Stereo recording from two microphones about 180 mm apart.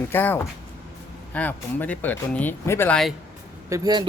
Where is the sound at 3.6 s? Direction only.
20° right (ahead or behind).